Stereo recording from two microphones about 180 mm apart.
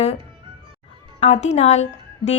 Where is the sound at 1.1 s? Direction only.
40° left (ahead or behind).